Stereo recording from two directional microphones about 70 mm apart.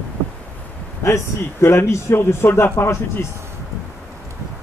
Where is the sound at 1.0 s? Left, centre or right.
Left.